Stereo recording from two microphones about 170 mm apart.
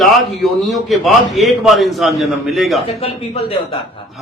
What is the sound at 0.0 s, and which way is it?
A man's voice, centre (ahead or behind).